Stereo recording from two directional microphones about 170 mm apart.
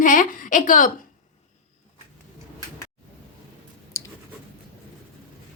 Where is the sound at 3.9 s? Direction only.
20° left (ahead or behind).